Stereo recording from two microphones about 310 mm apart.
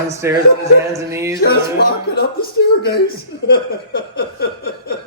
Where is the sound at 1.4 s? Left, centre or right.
Left.